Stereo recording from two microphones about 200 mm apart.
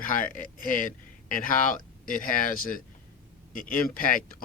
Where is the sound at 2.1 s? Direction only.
45° left (ahead or behind).